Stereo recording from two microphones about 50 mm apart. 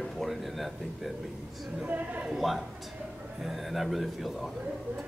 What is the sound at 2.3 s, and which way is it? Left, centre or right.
Speech, centre.